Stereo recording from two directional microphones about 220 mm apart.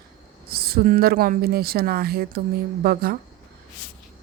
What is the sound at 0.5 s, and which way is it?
Speech, 45° right (ahead or behind).